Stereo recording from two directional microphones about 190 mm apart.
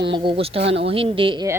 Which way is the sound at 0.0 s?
25° right (ahead or behind).